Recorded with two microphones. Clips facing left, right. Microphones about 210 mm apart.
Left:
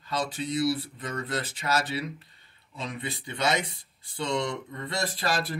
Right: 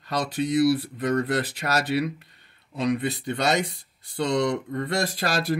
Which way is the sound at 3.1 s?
40° right (ahead or behind).